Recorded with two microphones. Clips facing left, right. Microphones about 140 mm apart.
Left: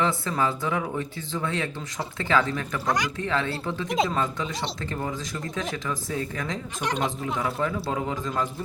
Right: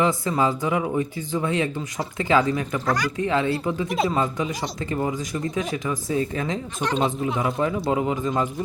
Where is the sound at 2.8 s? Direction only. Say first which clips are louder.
Right 1 dB; 20° left (ahead or behind).